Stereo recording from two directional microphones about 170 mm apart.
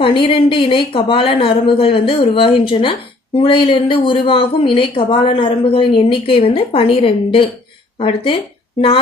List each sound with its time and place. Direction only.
0.0 s speech: 30° left (ahead or behind)